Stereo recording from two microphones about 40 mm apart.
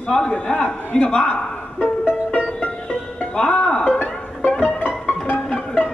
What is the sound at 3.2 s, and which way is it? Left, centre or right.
Speech, left.